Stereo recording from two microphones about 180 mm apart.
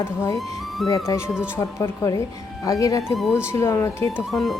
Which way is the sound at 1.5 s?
15° left (ahead or behind).